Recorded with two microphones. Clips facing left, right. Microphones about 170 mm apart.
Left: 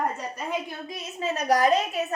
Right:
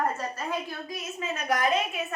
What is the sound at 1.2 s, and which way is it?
Speech, 35° left (ahead or behind).